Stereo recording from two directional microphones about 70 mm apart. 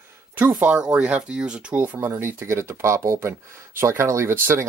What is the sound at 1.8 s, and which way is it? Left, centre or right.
Speech, right.